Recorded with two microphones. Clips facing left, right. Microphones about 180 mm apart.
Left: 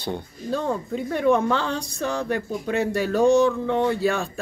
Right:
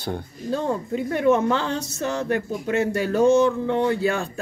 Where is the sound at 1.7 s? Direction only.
15° left (ahead or behind).